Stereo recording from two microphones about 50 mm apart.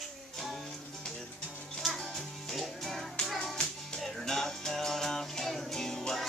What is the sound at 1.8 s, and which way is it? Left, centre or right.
Music, centre.